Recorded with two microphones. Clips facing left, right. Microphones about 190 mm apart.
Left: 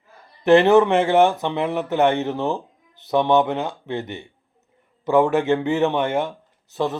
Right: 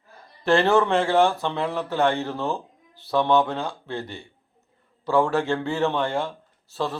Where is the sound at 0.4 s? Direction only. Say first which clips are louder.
Left 6 dB; 20° left (ahead or behind).